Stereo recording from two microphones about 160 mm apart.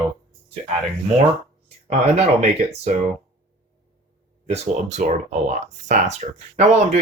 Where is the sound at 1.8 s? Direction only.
45° right (ahead or behind).